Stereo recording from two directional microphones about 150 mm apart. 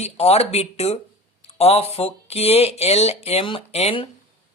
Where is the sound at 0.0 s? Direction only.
45° left (ahead or behind).